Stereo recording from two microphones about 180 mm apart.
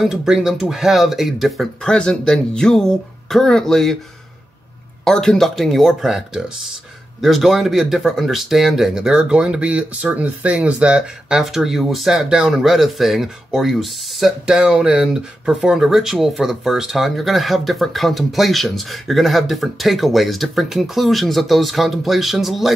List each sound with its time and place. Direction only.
0.0 s speech: centre (ahead or behind)
5.0 s speech: 5° left (ahead or behind)